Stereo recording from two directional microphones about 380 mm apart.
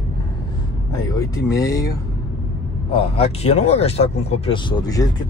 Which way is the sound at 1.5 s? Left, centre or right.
Centre.